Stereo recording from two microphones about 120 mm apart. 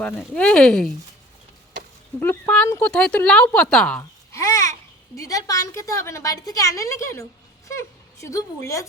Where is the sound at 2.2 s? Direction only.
10° left (ahead or behind).